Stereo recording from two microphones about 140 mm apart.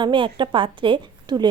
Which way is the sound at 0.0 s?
35° right (ahead or behind).